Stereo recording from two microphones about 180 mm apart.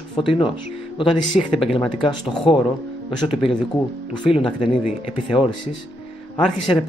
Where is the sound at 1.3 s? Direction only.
Centre (ahead or behind).